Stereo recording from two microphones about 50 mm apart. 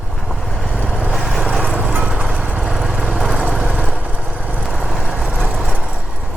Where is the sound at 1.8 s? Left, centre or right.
Right.